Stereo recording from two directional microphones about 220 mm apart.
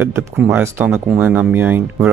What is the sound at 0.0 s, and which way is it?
Speech, 10° right (ahead or behind).